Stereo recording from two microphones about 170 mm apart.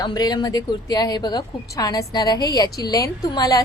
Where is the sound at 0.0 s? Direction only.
25° left (ahead or behind).